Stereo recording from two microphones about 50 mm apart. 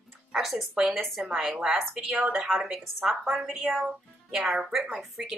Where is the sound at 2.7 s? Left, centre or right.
Centre.